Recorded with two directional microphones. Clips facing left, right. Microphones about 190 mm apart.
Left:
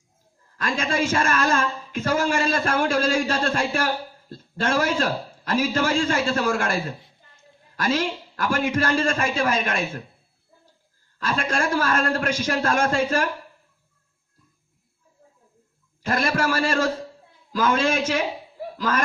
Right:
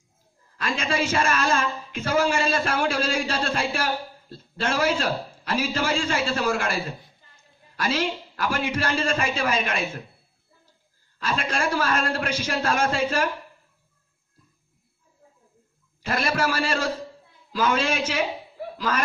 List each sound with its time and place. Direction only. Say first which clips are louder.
0.6 s a woman's voice: left 2 dB; 45° left (ahead or behind)
11.1 s a woman's voice: left 2 dB; 45° left (ahead or behind)
16.0 s a woman's voice: left 2 dB; 45° left (ahead or behind)